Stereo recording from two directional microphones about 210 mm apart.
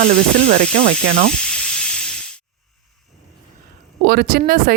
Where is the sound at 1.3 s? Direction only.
5° left (ahead or behind).